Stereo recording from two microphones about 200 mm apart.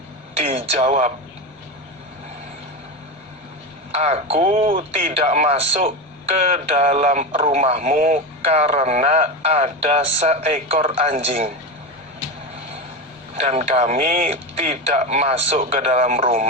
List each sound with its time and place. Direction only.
0.7 s speech: 35° right (ahead or behind)
3.9 s a man's voice: 30° right (ahead or behind)
13.3 s speech: 35° right (ahead or behind)